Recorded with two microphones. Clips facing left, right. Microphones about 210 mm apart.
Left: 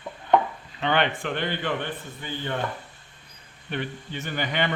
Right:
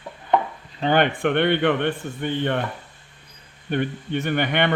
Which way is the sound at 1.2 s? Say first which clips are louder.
Right 9 dB; 65° right (ahead or behind).